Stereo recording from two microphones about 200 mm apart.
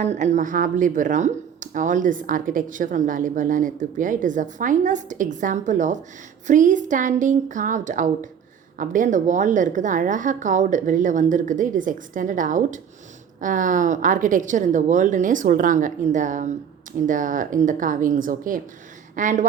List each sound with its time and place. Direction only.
0.0 s speech: 35° right (ahead or behind)